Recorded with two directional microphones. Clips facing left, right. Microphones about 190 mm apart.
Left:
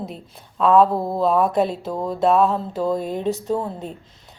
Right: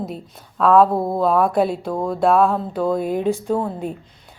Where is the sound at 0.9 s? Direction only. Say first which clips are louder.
Right 2 dB; 25° right (ahead or behind).